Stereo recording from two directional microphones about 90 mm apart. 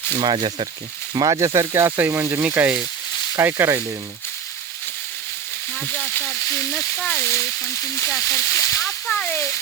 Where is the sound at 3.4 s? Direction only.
25° right (ahead or behind).